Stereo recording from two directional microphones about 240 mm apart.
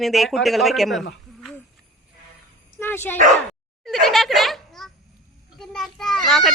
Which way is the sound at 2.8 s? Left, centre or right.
Centre.